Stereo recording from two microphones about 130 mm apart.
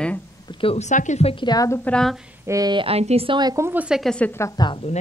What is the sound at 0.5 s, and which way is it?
Speech, 45° left (ahead or behind).